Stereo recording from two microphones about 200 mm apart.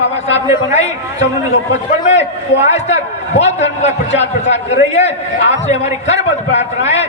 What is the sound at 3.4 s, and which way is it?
A man's voice, 35° left (ahead or behind).